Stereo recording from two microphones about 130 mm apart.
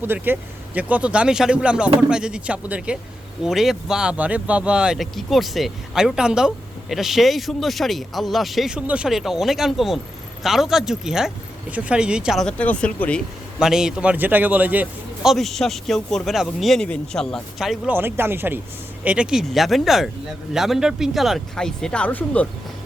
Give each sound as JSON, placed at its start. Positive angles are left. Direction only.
{"t": 0.0, "sound": "speech", "side_deg": -15}
{"t": 13.6, "sound": "speech", "side_deg": -5}
{"t": 17.8, "sound": "speech", "side_deg": -15}